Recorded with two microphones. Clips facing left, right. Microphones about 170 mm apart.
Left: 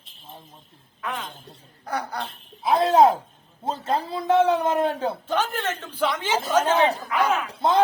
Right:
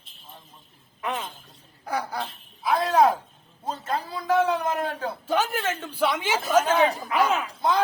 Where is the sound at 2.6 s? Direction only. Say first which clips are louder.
Left 3 dB; 25° left (ahead or behind).